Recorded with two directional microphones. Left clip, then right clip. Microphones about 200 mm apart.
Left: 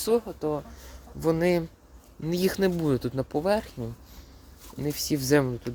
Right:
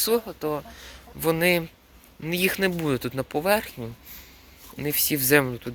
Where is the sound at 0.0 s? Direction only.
15° left (ahead or behind).